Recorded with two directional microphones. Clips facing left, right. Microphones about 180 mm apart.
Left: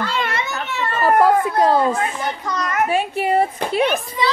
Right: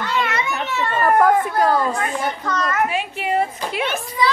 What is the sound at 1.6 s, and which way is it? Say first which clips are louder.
A child's voice: left 2 dB; 25° left (ahead or behind).